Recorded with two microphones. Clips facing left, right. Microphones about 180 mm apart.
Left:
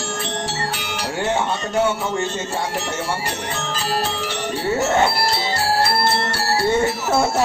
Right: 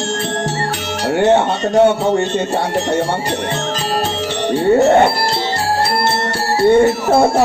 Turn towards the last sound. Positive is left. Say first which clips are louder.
# right 7 dB
turn(degrees=-55)  # may be behind; listen again after turning